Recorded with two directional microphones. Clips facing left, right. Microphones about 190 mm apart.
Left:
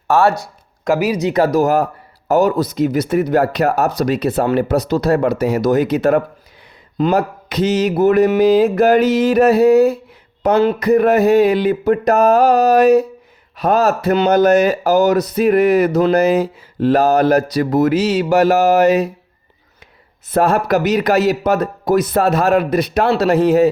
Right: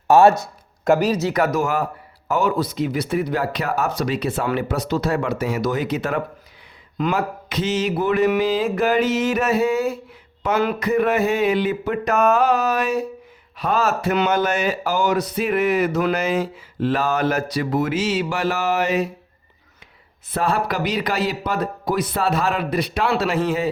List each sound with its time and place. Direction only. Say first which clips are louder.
0.1 s speech: right 1 dB; 20° right (ahead or behind)
0.9 s speech: left 1 dB; 10° left (ahead or behind)
1.3 s speech: left 6 dB; 30° left (ahead or behind)
20.3 s speech: left 7 dB; 45° left (ahead or behind)